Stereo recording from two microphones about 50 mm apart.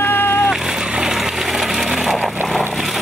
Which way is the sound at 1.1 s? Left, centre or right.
Centre.